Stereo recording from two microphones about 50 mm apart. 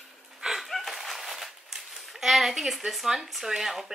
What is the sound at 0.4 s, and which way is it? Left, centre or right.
Speech, centre.